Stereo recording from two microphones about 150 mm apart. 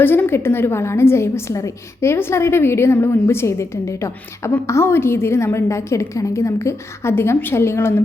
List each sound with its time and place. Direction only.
0.0 s a woman's voice: 15° left (ahead or behind)